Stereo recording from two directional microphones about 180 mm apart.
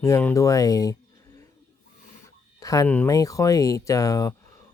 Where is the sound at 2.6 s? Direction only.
20° left (ahead or behind).